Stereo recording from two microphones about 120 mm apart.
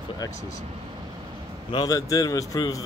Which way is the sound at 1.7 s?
30° left (ahead or behind).